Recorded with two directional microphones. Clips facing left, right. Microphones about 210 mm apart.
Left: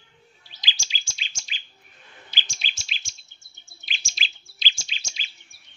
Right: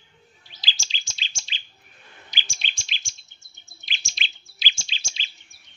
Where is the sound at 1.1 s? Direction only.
30° right (ahead or behind).